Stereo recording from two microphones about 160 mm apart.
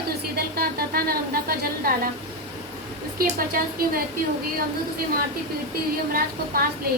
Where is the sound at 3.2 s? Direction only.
65° right (ahead or behind).